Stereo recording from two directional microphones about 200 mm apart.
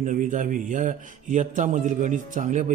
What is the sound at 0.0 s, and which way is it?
Speech, 40° right (ahead or behind).